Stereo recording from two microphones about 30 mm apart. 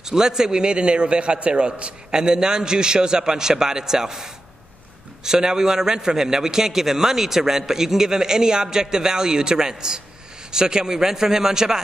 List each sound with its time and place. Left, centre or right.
0.0 s a man's voice: centre; by 2.0 s right
2.0 s a man's voice: right